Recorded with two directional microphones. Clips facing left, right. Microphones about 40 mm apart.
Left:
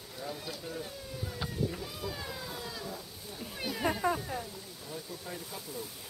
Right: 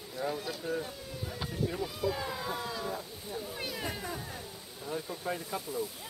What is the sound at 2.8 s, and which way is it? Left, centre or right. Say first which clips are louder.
Speech: right 4 dB; right.